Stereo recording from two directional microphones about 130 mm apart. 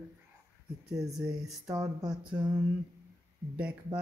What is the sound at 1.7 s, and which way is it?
Speech, 30° right (ahead or behind).